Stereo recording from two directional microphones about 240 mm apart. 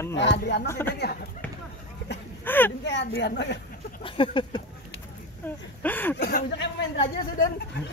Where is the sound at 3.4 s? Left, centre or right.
Left.